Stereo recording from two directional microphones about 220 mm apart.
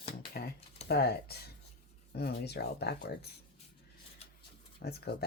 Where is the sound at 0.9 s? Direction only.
45° left (ahead or behind).